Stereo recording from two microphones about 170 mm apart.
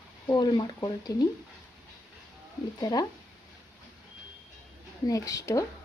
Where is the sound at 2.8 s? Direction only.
25° left (ahead or behind).